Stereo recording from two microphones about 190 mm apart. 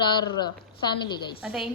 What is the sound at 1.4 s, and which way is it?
Speech, 5° right (ahead or behind).